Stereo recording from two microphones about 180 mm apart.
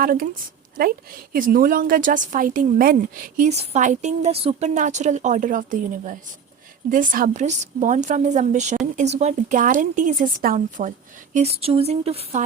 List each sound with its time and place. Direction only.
0.0 s a woman's voice: 50° right (ahead or behind)
6.9 s a woman's voice: 50° right (ahead or behind)
11.3 s a woman's voice: 35° right (ahead or behind)